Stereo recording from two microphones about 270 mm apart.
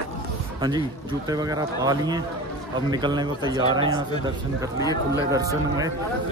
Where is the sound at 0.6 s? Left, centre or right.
Centre.